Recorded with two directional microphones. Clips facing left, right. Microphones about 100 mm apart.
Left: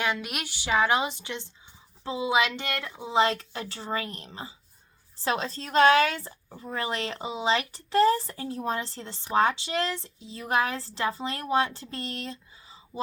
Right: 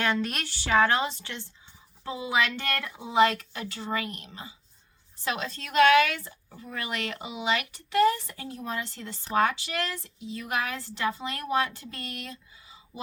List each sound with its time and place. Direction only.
0.0 s a woman's voice: 10° left (ahead or behind); by 12.7 s 30° left (ahead or behind)